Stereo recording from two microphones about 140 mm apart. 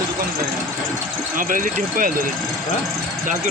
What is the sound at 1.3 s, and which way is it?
Speech, 75° right (ahead or behind).